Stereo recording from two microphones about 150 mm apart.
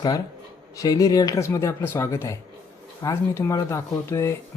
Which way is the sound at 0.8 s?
25° left (ahead or behind).